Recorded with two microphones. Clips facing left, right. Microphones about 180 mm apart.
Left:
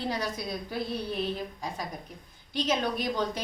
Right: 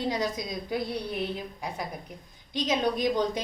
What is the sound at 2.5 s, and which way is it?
Speech, 15° right (ahead or behind).